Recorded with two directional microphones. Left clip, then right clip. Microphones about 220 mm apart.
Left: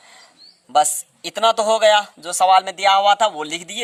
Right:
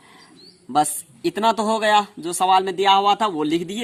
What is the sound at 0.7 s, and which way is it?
Speech, 40° left (ahead or behind).